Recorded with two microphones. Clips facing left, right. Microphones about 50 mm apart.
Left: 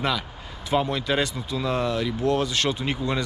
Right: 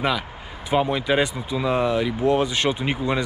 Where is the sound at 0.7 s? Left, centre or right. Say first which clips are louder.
Right 3 dB; centre.